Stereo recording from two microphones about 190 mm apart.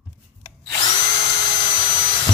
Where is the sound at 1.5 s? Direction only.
25° left (ahead or behind).